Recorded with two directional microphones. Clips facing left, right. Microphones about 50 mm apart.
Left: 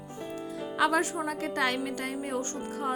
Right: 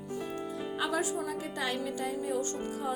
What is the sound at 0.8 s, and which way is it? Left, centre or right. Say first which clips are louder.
A woman's voice: left 6 dB; left.